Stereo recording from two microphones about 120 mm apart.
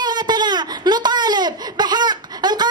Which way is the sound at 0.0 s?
35° right (ahead or behind).